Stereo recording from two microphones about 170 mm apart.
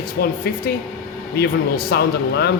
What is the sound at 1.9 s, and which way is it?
Speech, 70° left (ahead or behind).